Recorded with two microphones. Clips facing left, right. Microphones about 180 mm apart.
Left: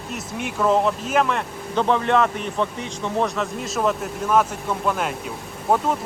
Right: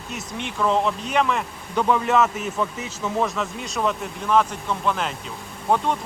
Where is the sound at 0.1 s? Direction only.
5° left (ahead or behind).